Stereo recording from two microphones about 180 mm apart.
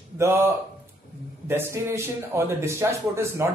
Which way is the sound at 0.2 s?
10° right (ahead or behind).